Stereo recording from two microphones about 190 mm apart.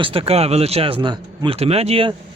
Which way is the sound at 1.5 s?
30° right (ahead or behind).